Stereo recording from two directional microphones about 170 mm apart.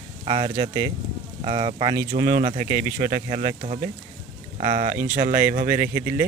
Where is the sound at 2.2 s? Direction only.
50° right (ahead or behind).